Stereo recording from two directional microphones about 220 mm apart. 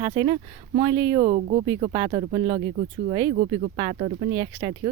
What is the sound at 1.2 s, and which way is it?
Speech, 30° right (ahead or behind).